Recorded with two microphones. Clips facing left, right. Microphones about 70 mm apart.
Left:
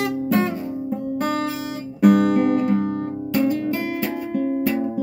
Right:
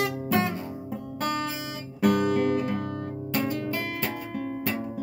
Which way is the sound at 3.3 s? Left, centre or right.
Centre.